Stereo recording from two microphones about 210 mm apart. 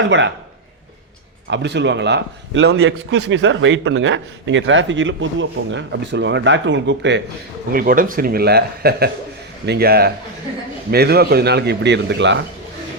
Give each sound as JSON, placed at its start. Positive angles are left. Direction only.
{"t": 1.5, "sound": "a man's voice", "side_deg": -55}
{"t": 7.7, "sound": "a man's voice", "side_deg": -45}